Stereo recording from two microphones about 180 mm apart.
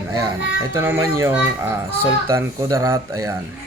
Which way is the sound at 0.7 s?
15° right (ahead or behind).